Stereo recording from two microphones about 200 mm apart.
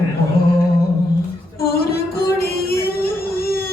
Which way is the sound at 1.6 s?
50° left (ahead or behind).